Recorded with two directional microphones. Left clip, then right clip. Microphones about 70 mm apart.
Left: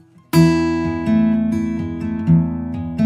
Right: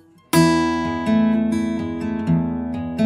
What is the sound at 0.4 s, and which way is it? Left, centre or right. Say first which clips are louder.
Music: left 1 dB; left.